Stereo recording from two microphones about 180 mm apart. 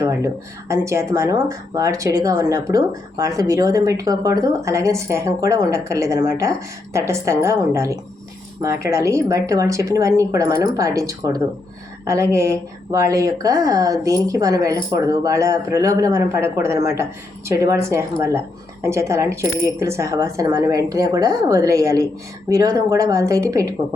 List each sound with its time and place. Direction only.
0.7 s speech: 15° right (ahead or behind)